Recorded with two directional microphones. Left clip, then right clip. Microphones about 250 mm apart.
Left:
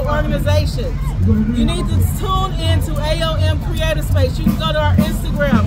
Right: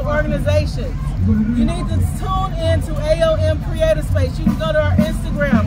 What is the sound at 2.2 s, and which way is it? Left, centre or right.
Speech, centre.